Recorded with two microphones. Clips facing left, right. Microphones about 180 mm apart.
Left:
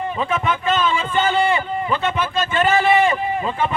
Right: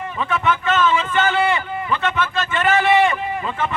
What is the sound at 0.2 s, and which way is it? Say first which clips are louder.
Speech: right 3 dB; 20° left (ahead or behind).